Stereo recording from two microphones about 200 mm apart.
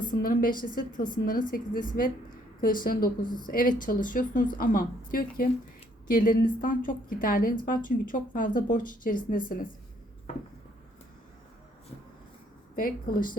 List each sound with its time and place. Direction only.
0.0 s a woman's voice: 45° left (ahead or behind)
12.7 s a woman's voice: 45° left (ahead or behind)